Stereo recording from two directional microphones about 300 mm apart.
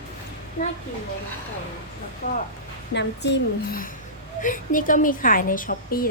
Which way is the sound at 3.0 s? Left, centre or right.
Left.